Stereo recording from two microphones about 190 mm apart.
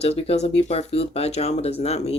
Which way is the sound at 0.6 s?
30° left (ahead or behind).